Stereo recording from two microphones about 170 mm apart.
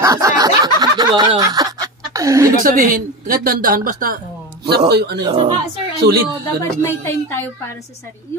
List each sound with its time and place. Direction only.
0.0 s a sound: 20° right (ahead or behind)
2.6 s speech: 55° right (ahead or behind)
4.6 s a man's voice: 70° right (ahead or behind)
5.2 s a woman's voice: 30° right (ahead or behind)
6.6 s speech: 15° left (ahead or behind)